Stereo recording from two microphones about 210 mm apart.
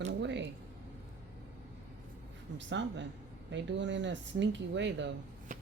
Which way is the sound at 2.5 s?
60° right (ahead or behind).